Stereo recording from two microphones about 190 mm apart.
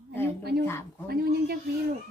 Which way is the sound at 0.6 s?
10° left (ahead or behind).